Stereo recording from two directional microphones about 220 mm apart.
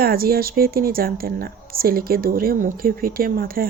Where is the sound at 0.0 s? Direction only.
45° right (ahead or behind).